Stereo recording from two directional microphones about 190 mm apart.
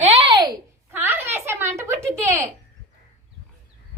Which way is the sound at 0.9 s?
10° right (ahead or behind).